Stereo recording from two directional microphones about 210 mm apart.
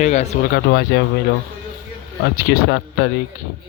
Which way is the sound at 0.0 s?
35° left (ahead or behind).